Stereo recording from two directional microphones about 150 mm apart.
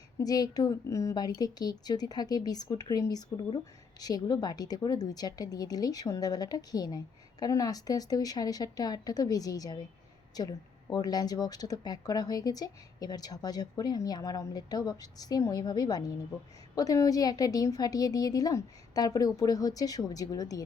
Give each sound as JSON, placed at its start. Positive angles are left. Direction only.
{"t": 0.2, "sound": "speech", "side_deg": 25}